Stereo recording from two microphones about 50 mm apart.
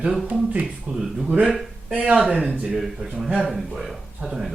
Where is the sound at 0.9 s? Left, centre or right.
Centre.